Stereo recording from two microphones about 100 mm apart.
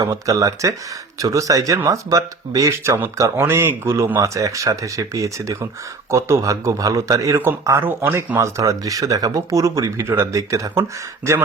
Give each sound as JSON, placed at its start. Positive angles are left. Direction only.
{"t": 0.0, "sound": "speech", "side_deg": -35}